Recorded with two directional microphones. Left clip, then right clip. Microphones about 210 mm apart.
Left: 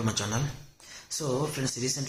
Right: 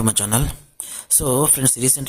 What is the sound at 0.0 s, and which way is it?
A man's voice, 50° right (ahead or behind).